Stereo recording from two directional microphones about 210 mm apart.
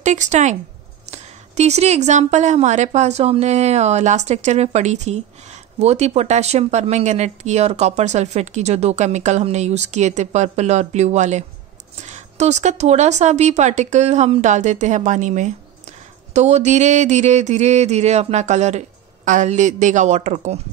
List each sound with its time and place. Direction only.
0.0 s a woman's voice: 35° right (ahead or behind)